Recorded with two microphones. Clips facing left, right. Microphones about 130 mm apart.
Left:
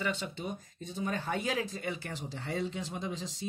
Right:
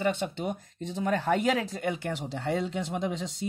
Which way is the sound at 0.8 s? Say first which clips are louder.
Right 7 dB; 85° right.